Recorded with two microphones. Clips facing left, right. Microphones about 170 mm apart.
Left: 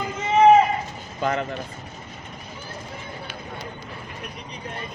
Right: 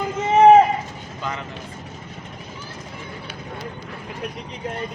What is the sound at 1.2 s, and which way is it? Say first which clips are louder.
Vehicle: left 6 dB; 55° left (ahead or behind).